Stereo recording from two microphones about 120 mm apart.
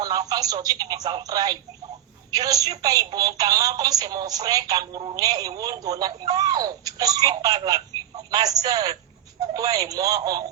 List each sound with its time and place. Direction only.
0.0 s speech: 30° right (ahead or behind)